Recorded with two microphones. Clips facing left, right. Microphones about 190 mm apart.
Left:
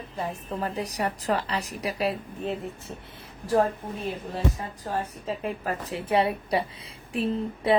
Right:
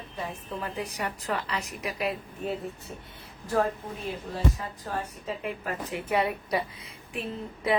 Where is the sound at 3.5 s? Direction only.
35° left (ahead or behind).